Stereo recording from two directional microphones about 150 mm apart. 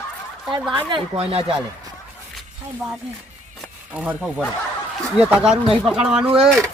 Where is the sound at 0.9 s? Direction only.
40° right (ahead or behind).